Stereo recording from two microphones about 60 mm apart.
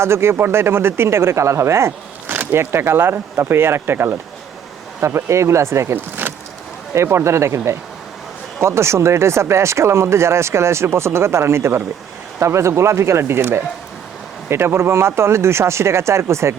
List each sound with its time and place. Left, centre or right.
0.0 s speech: right
2.3 s speech: right
5.0 s speech: right